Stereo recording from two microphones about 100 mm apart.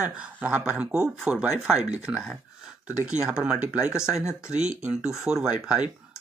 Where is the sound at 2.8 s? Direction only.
10° right (ahead or behind).